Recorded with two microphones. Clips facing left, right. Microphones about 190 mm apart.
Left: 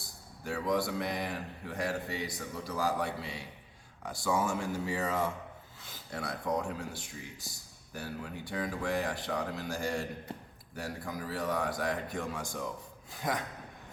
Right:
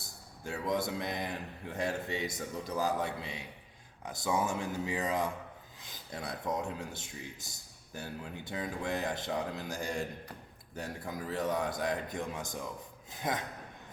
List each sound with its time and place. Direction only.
0.4 s a man's voice: 20° right (ahead or behind)